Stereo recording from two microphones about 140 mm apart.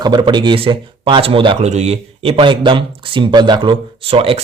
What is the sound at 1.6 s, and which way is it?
Speech, 50° right (ahead or behind).